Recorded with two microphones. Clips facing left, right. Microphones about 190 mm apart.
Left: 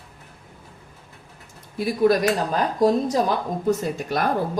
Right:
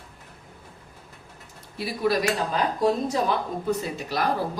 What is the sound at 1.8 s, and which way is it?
Speech, 45° left (ahead or behind).